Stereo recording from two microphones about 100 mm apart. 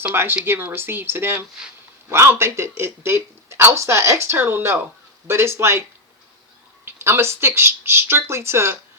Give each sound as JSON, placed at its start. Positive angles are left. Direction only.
{"t": 0.0, "sound": "speech", "side_deg": -20}
{"t": 6.8, "sound": "speech", "side_deg": -25}